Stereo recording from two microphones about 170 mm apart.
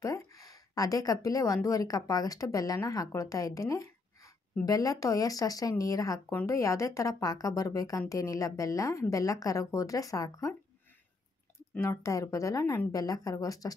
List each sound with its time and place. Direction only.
0.0 s a woman's voice: 20° left (ahead or behind)
11.7 s speech: 15° left (ahead or behind)